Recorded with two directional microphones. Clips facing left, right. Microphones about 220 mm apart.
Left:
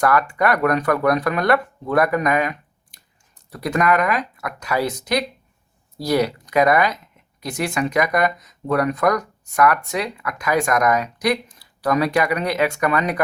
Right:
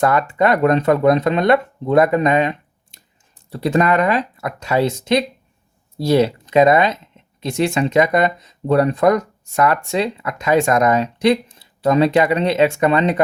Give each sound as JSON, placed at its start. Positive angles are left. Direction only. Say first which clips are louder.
{"t": 0.0, "sound": "speech", "louder": "right 3 dB", "side_deg": -25}